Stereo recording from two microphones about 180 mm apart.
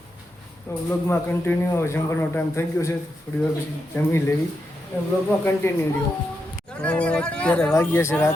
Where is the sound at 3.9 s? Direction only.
10° left (ahead or behind).